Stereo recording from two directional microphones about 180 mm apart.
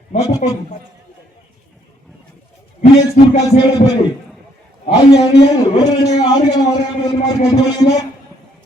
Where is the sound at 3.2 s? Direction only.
45° left (ahead or behind).